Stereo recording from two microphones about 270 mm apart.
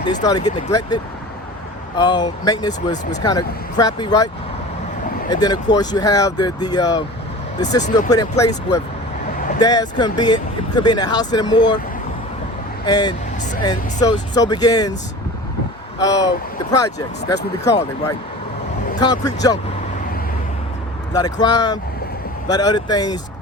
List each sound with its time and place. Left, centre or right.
0.3 s speech: centre
5.3 s speech: centre
7.9 s speech: left
8.1 s speech: centre
12.8 s speech: centre
13.4 s vehicle: left
13.7 s speech: centre
16.0 s speech: centre
18.9 s speech: centre
21.1 s speech: centre